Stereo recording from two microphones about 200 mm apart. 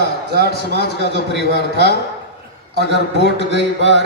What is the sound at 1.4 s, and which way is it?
A man's voice, 55° left (ahead or behind).